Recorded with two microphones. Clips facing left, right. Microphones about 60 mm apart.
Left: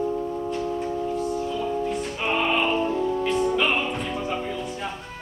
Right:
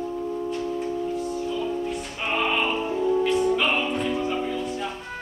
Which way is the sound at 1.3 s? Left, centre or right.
Centre.